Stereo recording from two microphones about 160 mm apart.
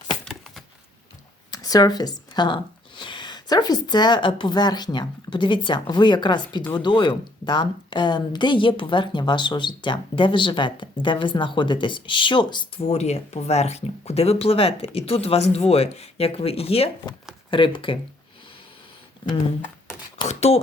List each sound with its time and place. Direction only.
1.5 s speech: 25° left (ahead or behind)
20.2 s speech: 45° left (ahead or behind)